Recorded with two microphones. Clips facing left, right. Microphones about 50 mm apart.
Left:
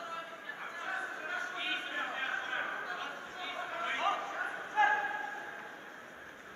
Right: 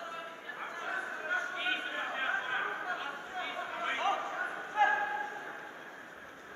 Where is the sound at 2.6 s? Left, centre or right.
Centre.